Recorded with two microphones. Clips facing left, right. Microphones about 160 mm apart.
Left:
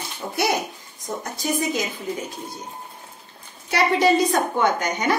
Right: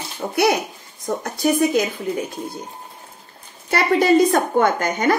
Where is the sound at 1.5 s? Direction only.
60° right (ahead or behind).